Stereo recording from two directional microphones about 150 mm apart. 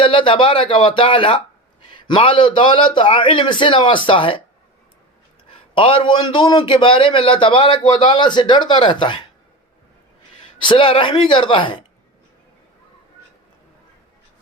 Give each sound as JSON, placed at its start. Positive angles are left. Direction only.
{"t": 0.0, "sound": "a man's voice", "side_deg": 35}
{"t": 5.7, "sound": "a man's voice", "side_deg": 35}
{"t": 10.6, "sound": "a man's voice", "side_deg": 35}